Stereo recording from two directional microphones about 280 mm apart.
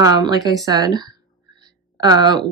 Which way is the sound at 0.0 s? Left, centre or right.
Centre.